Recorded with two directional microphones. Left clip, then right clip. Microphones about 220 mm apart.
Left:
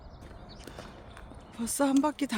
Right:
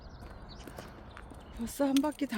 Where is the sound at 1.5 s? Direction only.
20° left (ahead or behind).